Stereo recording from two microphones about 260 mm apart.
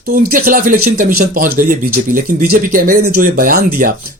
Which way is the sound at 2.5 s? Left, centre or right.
Right.